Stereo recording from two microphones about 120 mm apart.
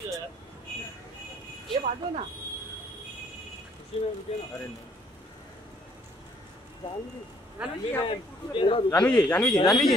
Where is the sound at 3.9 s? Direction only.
50° left (ahead or behind).